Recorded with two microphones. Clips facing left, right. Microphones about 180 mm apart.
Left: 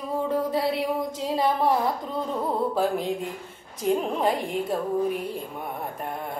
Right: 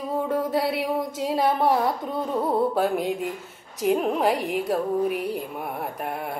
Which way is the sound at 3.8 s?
10° right (ahead or behind).